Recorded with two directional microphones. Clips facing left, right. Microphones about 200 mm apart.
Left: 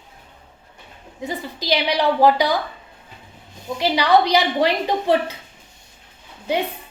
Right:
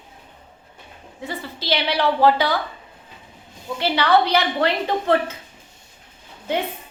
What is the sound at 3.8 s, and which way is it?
A woman's voice, 15° left (ahead or behind).